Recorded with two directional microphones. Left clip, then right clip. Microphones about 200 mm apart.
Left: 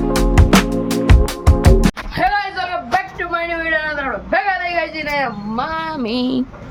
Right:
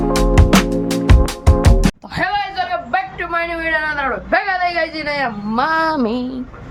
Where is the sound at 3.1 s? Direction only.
20° right (ahead or behind); by 5.9 s 40° right (ahead or behind).